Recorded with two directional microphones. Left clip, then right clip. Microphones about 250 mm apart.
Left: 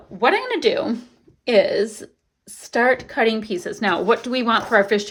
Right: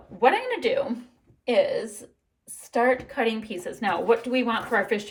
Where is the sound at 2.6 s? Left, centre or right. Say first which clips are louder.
Left 4 dB; left.